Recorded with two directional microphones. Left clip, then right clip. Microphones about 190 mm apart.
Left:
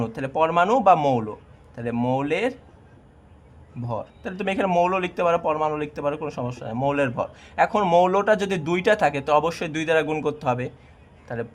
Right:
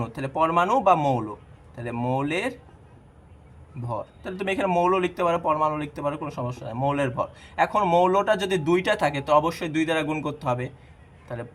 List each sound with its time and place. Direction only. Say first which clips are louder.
0.0 s a man's voice: left 2 dB; 30° left (ahead or behind)
3.8 s speech: left 1 dB; 30° left (ahead or behind)